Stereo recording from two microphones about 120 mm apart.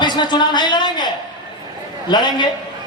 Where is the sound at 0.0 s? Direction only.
40° left (ahead or behind).